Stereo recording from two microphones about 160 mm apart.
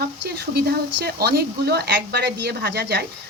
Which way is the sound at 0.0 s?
85° right.